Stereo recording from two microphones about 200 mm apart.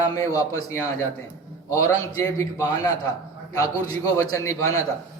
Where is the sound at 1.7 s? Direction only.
15° left (ahead or behind).